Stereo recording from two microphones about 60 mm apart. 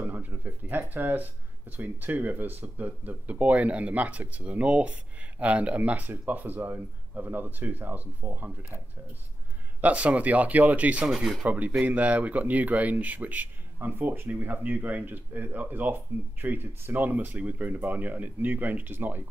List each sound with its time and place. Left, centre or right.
0.0 s speech: right
11.1 s speech: centre
11.4 s speech: right